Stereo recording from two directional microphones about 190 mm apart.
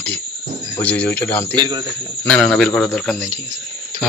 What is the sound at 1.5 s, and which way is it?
Speech, 20° right (ahead or behind).